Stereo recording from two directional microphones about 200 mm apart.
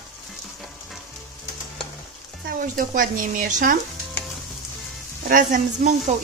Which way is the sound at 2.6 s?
45° right (ahead or behind).